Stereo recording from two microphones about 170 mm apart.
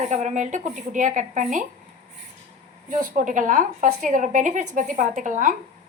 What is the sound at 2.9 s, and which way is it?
A woman's voice, 50° right (ahead or behind).